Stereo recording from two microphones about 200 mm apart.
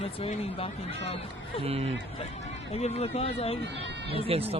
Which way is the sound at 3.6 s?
60° right (ahead or behind).